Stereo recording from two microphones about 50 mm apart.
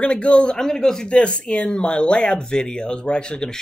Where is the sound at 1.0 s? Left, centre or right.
Left.